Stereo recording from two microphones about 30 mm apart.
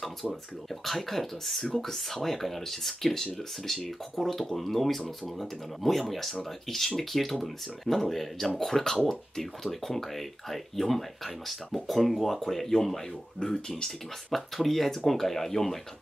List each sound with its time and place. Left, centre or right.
0.7 s speech: centre
12.4 s speech: centre
13.4 s speech: left
13.8 s speech: centre